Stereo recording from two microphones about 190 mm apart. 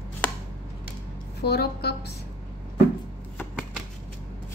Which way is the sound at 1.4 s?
60° left (ahead or behind).